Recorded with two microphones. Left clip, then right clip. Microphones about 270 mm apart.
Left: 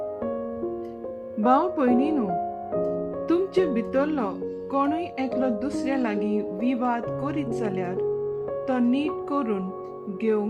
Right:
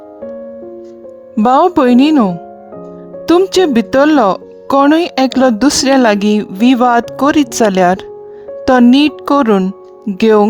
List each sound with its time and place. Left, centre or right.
1.4 s speech: right
3.2 s speech: right